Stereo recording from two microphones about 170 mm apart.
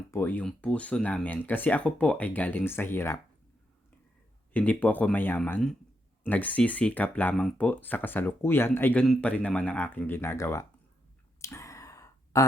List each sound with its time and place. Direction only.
0.1 s speech: 10° left (ahead or behind)
4.5 s speech: 10° left (ahead or behind)
11.3 s sigh: 15° left (ahead or behind)